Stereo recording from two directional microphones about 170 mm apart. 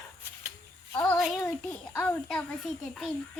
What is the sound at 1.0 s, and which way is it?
A child's voice, centre (ahead or behind).